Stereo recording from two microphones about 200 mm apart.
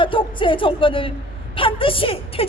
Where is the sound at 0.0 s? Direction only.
25° left (ahead or behind).